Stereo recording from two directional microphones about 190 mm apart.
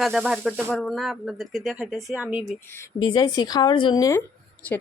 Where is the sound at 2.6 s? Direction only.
15° left (ahead or behind).